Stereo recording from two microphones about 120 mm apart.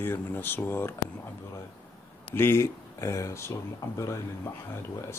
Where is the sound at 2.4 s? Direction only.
20° left (ahead or behind).